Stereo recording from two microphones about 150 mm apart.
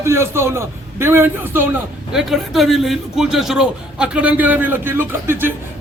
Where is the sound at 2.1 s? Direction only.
Centre (ahead or behind).